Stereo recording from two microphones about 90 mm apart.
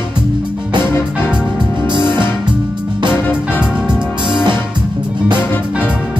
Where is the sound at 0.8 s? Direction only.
25° left (ahead or behind).